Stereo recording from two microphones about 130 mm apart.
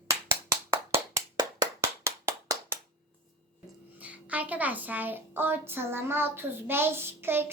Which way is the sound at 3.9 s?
10° right (ahead or behind).